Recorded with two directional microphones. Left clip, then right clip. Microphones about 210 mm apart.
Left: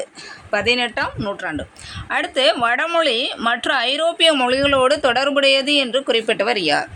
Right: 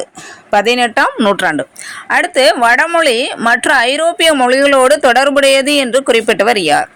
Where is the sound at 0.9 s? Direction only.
35° right (ahead or behind).